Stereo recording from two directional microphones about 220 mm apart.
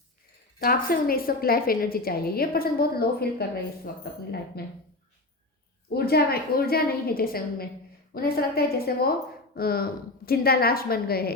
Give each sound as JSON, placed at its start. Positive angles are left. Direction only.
{"t": 0.6, "sound": "a woman's voice", "side_deg": 40}
{"t": 4.6, "sound": "a woman's voice", "side_deg": 45}
{"t": 5.9, "sound": "a woman's voice", "side_deg": 45}